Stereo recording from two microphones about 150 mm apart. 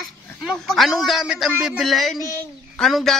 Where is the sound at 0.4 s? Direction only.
Centre (ahead or behind).